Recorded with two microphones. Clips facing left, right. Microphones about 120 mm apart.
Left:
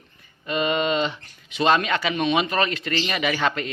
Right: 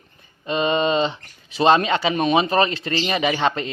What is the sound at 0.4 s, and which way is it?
Speech, 30° right (ahead or behind).